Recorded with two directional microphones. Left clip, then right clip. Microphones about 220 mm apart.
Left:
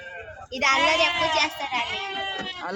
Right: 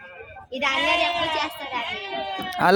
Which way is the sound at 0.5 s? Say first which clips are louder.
Left 1 dB; 5° left (ahead or behind).